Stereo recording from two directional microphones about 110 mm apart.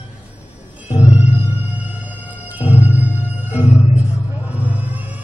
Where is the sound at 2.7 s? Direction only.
15° right (ahead or behind).